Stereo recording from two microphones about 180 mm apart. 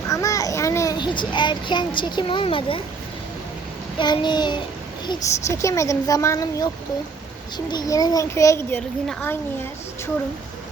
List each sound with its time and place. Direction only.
0.1 s a child's voice: 20° left (ahead or behind)
3.9 s a child's voice: 25° left (ahead or behind)